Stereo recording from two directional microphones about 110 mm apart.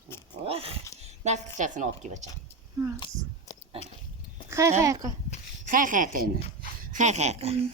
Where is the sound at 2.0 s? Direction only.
90° right.